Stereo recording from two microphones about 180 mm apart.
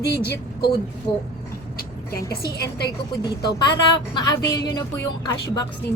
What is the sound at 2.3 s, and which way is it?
Speech, 60° left (ahead or behind).